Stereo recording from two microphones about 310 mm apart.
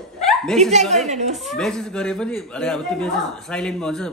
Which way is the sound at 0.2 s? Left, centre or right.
Centre.